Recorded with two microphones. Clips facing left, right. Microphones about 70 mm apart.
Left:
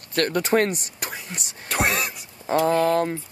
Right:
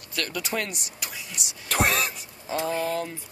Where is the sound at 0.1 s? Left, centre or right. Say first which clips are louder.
Left 9 dB; left.